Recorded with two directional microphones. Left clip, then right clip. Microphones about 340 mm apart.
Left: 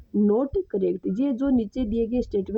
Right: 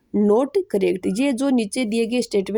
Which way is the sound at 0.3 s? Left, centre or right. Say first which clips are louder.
Right 6 dB; left.